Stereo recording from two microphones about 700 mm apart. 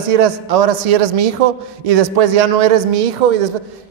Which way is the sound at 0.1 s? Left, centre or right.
Right.